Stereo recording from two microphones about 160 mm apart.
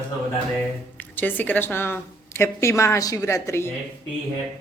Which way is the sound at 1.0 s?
10° left (ahead or behind).